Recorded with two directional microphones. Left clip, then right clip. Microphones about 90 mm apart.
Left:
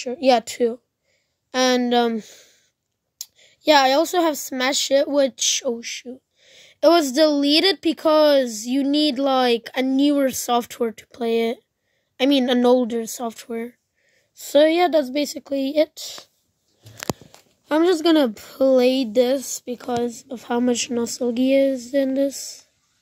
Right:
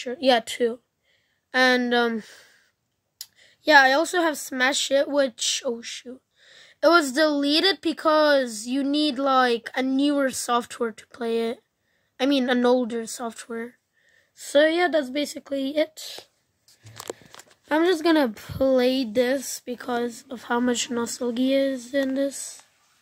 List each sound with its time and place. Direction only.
0.0 s a woman's voice: 20° left (ahead or behind)
3.2 s a woman's voice: 20° left (ahead or behind)
14.3 s speech: 30° left (ahead or behind)
17.6 s speech: 40° left (ahead or behind)
18.0 s speech: 20° left (ahead or behind)